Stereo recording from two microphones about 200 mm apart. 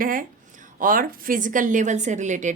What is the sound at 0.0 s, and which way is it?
A woman's voice, 45° right (ahead or behind).